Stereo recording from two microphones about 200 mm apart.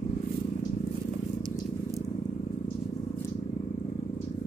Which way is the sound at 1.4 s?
15° right (ahead or behind).